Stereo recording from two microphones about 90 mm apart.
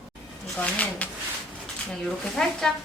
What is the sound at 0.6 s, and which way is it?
Speech, 15° left (ahead or behind).